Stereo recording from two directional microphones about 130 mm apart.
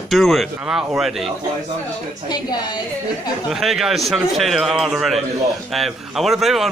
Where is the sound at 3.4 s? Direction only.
Centre (ahead or behind).